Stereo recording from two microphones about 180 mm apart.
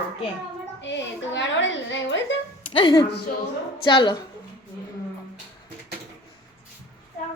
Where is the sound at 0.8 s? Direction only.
85° left.